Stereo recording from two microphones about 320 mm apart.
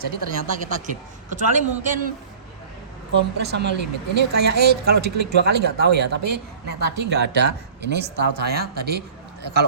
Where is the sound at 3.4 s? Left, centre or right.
Right.